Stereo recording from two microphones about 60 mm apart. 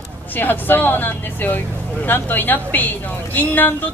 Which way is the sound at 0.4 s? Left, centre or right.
Left.